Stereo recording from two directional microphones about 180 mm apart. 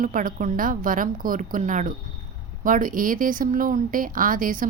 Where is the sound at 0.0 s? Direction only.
50° right (ahead or behind).